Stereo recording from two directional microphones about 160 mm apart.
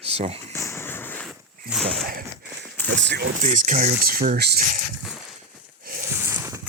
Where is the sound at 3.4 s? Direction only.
50° right (ahead or behind); by 4.6 s 80° right.